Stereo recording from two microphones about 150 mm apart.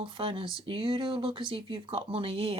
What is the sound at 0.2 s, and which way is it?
Speech, 35° right (ahead or behind).